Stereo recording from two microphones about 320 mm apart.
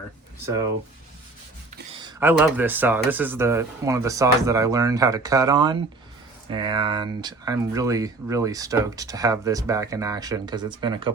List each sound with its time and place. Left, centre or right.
2.0 s speech: centre